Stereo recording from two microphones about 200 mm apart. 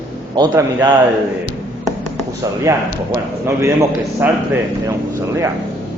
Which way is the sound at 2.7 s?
15° right (ahead or behind).